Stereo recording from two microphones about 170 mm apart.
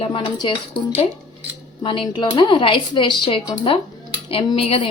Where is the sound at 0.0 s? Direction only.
30° left (ahead or behind).